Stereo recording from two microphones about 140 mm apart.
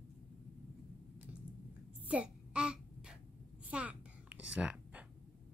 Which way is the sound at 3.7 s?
10° right (ahead or behind).